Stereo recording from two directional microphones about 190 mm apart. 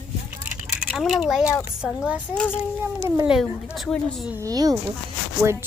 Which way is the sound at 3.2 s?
Centre (ahead or behind).